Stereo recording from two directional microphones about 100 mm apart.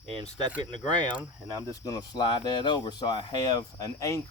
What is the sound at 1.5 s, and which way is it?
Speech, 30° left (ahead or behind).